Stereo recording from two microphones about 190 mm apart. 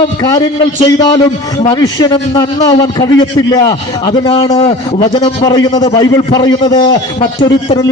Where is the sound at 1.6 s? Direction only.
20° left (ahead or behind).